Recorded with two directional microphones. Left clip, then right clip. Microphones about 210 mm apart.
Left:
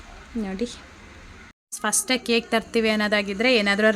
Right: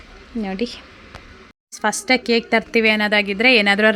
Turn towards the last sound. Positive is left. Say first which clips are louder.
# right 5 dB
turn(degrees=-10)  # may be behind; listen again after turning